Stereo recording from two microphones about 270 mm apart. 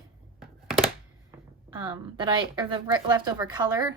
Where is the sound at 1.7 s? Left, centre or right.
Centre.